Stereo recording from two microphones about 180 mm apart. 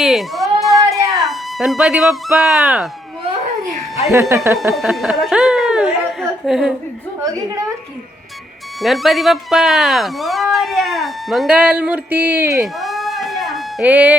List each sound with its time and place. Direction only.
0.0 s cat: centre (ahead or behind)
1.1 s speech: centre (ahead or behind)
4.1 s speech: 15° right (ahead or behind)
4.7 s a sound: centre (ahead or behind)
8.8 s speech: centre (ahead or behind)
12.5 s a sound: centre (ahead or behind)